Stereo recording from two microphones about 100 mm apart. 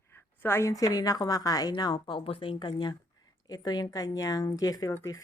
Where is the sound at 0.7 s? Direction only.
35° left (ahead or behind).